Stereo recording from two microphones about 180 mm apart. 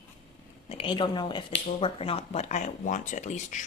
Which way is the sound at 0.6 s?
30° left (ahead or behind).